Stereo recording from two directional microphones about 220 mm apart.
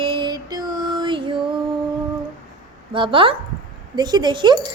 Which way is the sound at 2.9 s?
25° right (ahead or behind).